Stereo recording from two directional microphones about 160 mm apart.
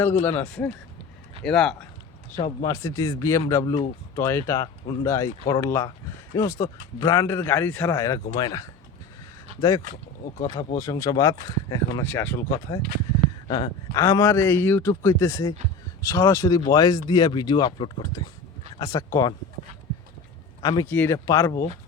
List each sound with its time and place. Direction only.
0.0 s a man's voice: 10° left (ahead or behind)
2.6 s a man's voice: 20° left (ahead or behind)
12.5 s speech: 25° left (ahead or behind)
13.9 s a man's voice: 20° left (ahead or behind)
20.6 s a man's voice: 25° left (ahead or behind)
20.9 s a man's voice: 10° left (ahead or behind)